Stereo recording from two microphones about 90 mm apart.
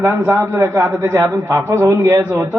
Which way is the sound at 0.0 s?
25° right (ahead or behind).